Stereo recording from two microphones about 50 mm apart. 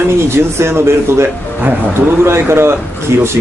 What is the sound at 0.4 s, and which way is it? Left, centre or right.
A man's voice, right.